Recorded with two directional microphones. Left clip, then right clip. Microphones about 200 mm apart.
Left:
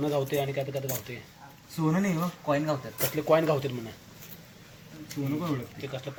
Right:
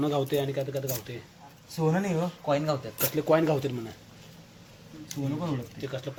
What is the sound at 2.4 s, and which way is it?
Speech, 60° right (ahead or behind).